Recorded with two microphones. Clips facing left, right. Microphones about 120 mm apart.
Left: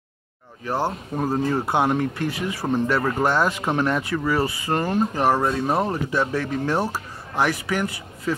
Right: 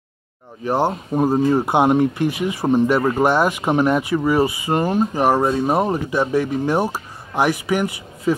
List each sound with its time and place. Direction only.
0.7 s speech: 20° right (ahead or behind)